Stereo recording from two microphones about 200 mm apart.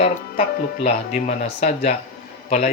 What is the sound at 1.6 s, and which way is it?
Speech, 35° left (ahead or behind).